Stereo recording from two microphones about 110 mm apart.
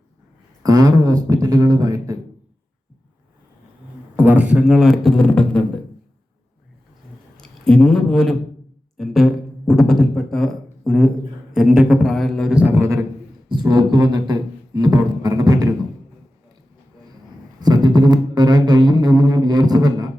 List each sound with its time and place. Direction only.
0.6 s a sound: 35° right (ahead or behind)
4.2 s a man's voice: 15° right (ahead or behind); by 5.8 s 10° left (ahead or behind)
7.3 s a man's voice: 5° left (ahead or behind)
9.0 s a sound: centre (ahead or behind)
11.5 s a man's voice: 5° right (ahead or behind)
12.5 s speech: 20° right (ahead or behind)
13.5 s beatboxing: 40° right (ahead or behind)
17.6 s didgeridoo: 40° right (ahead or behind)